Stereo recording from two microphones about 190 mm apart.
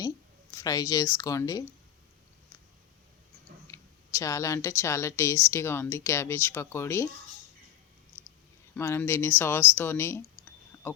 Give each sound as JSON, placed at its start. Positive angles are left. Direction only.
{"t": 0.5, "sound": "speech", "side_deg": 20}
{"t": 3.7, "sound": "speech", "side_deg": 15}
{"t": 8.7, "sound": "speech", "side_deg": 10}
{"t": 9.7, "sound": "clicking", "side_deg": 10}